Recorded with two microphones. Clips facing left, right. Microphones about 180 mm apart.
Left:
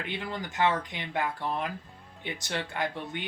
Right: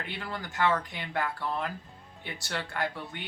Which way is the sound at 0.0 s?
20° left (ahead or behind).